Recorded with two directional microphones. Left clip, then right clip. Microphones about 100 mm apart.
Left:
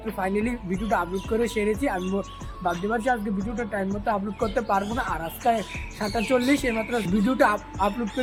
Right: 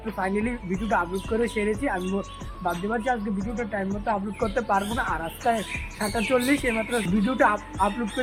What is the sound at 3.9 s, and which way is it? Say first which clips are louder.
A man's voice: left 1 dB; centre (ahead or behind).